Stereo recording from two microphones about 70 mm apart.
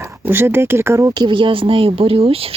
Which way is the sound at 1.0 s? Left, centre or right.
Right.